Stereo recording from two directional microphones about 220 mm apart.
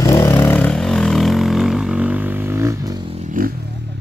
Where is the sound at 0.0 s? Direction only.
15° left (ahead or behind).